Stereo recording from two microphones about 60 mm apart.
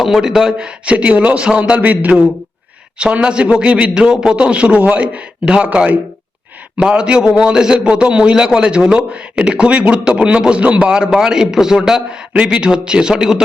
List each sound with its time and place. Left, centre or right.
0.0 s a man's voice: centre
0.9 s a man's voice: right